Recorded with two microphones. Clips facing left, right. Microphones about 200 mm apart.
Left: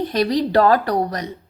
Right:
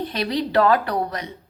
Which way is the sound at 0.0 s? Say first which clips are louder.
Left 5 dB; 40° left (ahead or behind).